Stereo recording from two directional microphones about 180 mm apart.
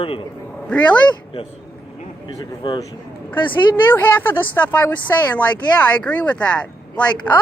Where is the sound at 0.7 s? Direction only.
5° left (ahead or behind).